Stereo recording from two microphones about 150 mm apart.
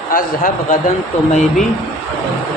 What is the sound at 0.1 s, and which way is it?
Speech, 65° left (ahead or behind).